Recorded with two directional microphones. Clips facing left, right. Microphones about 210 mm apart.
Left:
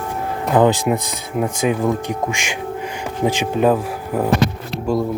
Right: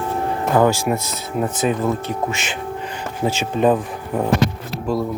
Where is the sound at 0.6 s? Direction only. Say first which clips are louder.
Left 2 dB; 20° left (ahead or behind).